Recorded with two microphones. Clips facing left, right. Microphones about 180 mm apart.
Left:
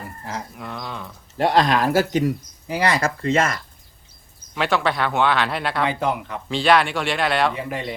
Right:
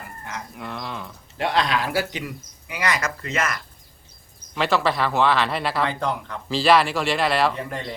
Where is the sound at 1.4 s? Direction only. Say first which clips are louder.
Left 5 dB; 45° left (ahead or behind); by 3.6 s 30° left (ahead or behind).